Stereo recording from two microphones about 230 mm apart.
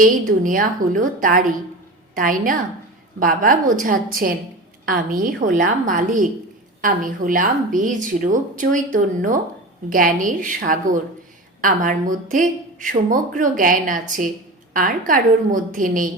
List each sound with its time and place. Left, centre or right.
0.0 s a woman's voice: right